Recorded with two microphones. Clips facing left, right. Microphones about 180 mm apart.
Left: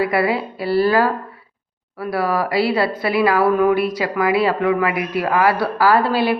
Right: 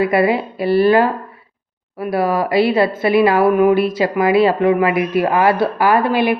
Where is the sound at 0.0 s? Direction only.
20° right (ahead or behind).